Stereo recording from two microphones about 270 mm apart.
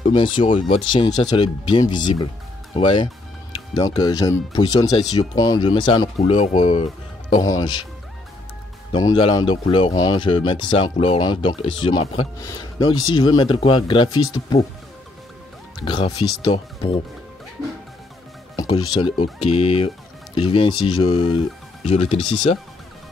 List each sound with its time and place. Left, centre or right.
0.0 s speech: centre
8.9 s speech: centre
15.8 s speech: centre
18.6 s speech: centre